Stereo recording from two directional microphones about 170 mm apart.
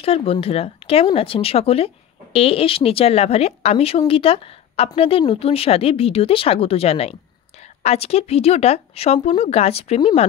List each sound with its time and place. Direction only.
0.0 s a woman's voice: 35° left (ahead or behind)